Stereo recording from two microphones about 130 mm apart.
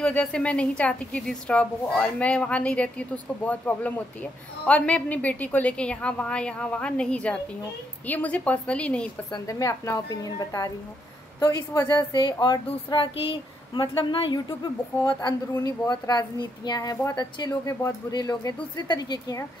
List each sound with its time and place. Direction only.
0.0 s a woman's voice: 10° left (ahead or behind)
9.3 s a woman's voice: 25° left (ahead or behind)